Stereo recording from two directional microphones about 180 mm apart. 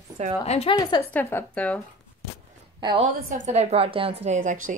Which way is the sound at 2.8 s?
25° right (ahead or behind).